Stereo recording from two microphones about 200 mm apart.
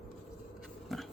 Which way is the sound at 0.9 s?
Centre (ahead or behind).